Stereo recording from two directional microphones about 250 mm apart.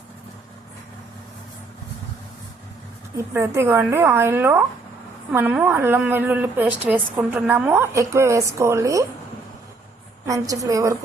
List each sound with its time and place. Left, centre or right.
3.2 s a woman's voice: centre
10.2 s a woman's voice: centre